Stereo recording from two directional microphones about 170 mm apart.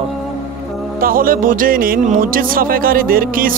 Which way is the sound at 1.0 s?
55° right (ahead or behind).